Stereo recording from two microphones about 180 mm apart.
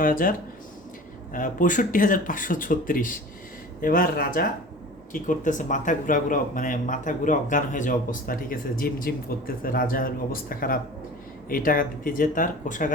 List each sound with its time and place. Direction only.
0.0 s speech: 50° left (ahead or behind)